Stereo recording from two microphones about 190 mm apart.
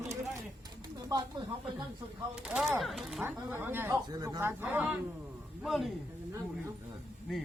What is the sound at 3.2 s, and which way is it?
A man's voice, 10° right (ahead or behind).